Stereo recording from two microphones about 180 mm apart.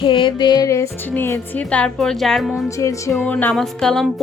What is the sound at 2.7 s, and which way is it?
Music, 15° left (ahead or behind).